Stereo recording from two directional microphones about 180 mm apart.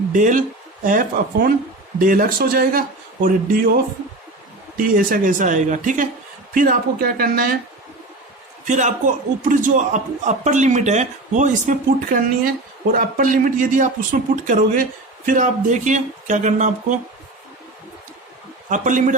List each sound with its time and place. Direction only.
0.1 s a man's voice: 45° right (ahead or behind)
4.9 s a man's voice: 50° right (ahead or behind)
8.6 s a man's voice: 45° right (ahead or behind)
18.7 s a man's voice: 45° right (ahead or behind)